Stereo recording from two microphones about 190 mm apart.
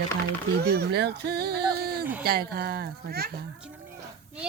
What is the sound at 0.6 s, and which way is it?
Speech, 60° right (ahead or behind).